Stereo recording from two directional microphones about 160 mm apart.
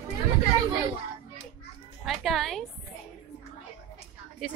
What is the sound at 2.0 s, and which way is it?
Speech, centre (ahead or behind).